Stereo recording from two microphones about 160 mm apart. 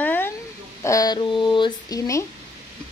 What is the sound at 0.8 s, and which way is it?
Speech, 25° left (ahead or behind).